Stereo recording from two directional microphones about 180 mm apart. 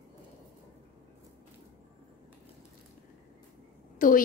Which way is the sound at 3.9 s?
50° left (ahead or behind).